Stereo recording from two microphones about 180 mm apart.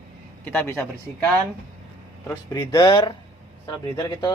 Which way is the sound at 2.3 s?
20° left (ahead or behind).